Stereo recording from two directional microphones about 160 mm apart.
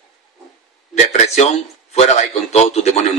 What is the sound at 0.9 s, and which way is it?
A man's voice, 45° left (ahead or behind).